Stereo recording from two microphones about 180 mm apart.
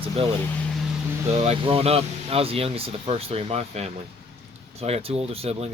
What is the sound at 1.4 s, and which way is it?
Speech, 35° right (ahead or behind).